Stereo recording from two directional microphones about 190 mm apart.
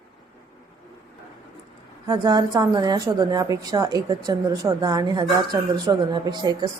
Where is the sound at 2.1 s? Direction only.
20° right (ahead or behind).